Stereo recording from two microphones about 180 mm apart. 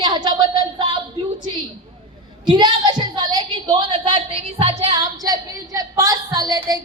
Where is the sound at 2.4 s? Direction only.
25° right (ahead or behind).